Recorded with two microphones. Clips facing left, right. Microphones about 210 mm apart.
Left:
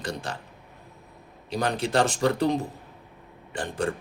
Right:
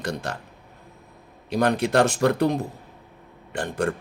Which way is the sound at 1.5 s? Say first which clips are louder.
Right 5 dB; 60° right (ahead or behind).